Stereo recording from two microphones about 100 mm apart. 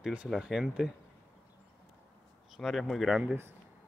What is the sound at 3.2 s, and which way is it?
Speech, 20° right (ahead or behind).